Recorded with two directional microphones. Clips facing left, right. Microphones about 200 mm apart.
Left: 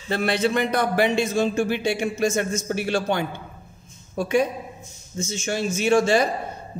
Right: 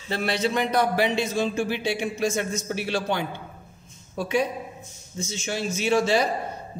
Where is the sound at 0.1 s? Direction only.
55° left (ahead or behind).